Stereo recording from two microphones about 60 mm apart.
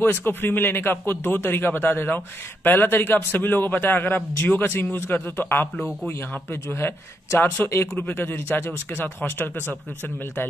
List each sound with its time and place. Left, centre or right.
0.0 s a man's voice: left